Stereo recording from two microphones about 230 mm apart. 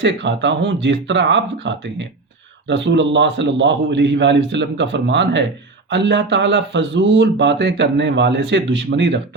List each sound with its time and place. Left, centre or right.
0.0 s speech: right